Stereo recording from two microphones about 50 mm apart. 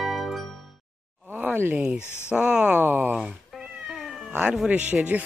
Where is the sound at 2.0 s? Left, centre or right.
Left.